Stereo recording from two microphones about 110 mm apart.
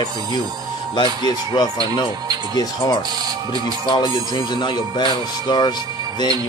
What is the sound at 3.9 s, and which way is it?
Speech, 45° left (ahead or behind).